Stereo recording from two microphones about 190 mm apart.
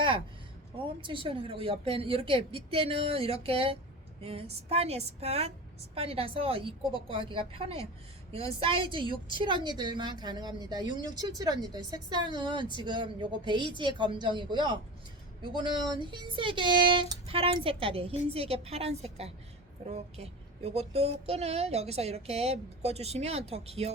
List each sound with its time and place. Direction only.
1.0 s a woman's voice: 25° right (ahead or behind)